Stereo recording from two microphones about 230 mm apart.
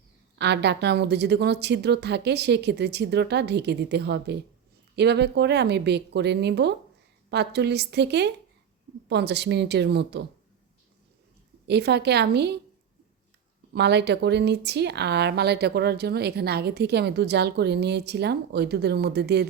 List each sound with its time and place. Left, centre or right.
0.3 s speech: right
11.7 s speech: right
13.7 s speech: right